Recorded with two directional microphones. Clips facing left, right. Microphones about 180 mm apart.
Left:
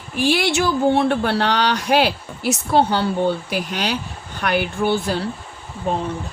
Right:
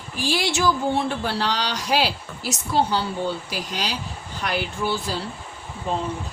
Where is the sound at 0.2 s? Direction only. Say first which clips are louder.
Left 5 dB; 60° left (ahead or behind).